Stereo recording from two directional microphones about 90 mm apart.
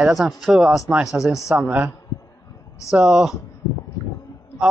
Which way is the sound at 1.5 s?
25° right (ahead or behind).